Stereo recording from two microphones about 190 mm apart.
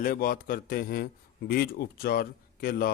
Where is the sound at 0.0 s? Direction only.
50° left (ahead or behind).